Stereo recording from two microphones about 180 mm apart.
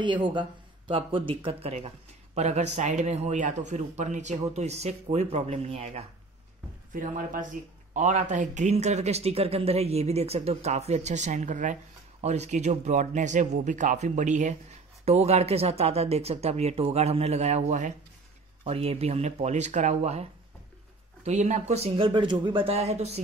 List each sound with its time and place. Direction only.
0.0 s a man's voice: 25° right (ahead or behind)
6.9 s a man's voice: 45° right (ahead or behind)